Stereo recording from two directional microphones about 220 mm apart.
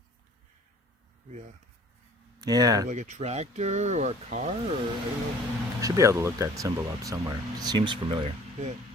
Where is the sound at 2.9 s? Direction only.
35° right (ahead or behind).